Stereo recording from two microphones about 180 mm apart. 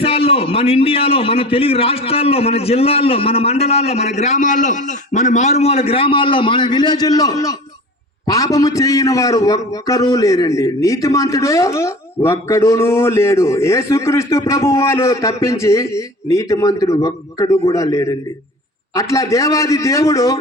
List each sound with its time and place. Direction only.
0.0 s a man's voice: 30° left (ahead or behind)